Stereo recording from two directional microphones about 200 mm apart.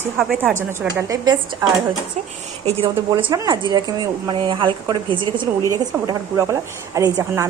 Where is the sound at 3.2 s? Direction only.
15° right (ahead or behind).